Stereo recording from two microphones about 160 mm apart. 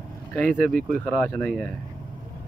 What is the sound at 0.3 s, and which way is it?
Speech, 10° left (ahead or behind).